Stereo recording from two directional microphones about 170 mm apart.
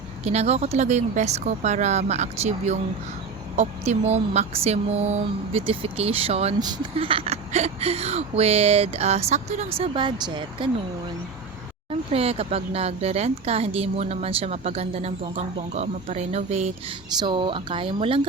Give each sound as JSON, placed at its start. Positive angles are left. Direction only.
{"t": 0.3, "sound": "speech", "side_deg": -40}
{"t": 11.9, "sound": "speech", "side_deg": -35}
{"t": 17.2, "sound": "speech", "side_deg": -30}